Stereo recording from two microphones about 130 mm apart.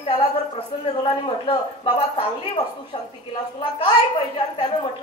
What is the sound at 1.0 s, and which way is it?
A woman's voice, 40° left (ahead or behind).